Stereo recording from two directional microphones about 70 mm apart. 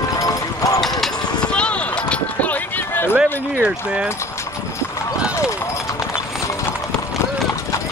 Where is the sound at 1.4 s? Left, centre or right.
Centre.